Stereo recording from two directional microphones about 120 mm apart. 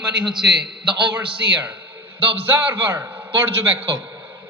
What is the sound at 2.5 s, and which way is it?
Speech, 15° right (ahead or behind).